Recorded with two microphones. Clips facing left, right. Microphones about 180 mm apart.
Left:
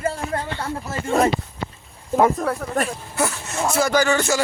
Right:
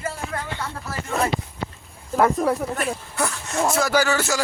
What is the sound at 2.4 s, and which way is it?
Speech, 5° right (ahead or behind).